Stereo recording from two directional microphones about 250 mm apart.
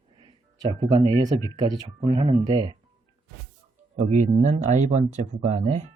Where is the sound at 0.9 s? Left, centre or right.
Centre.